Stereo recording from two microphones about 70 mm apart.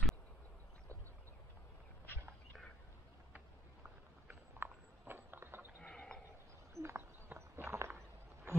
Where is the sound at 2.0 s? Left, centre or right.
Left.